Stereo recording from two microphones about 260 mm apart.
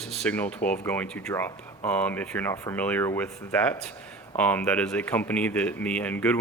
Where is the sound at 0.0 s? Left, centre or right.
Centre.